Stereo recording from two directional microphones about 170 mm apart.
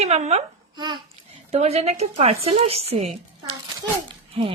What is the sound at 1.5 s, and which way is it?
A woman's voice, 35° right (ahead or behind).